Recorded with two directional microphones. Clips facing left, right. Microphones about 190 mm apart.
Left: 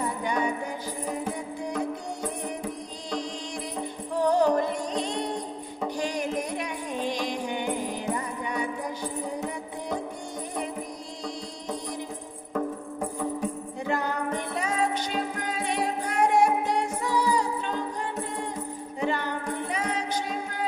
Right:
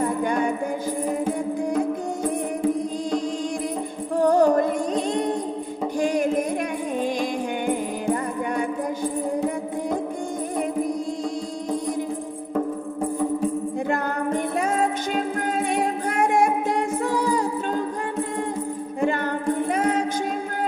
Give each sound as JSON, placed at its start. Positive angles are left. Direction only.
{"t": 0.2, "sound": "music", "side_deg": -50}
{"t": 4.1, "sound": "music", "side_deg": -50}
{"t": 13.8, "sound": "music", "side_deg": -50}
{"t": 18.9, "sound": "music", "side_deg": -50}